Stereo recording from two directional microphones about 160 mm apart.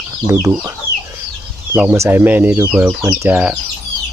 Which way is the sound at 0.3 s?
20° right (ahead or behind).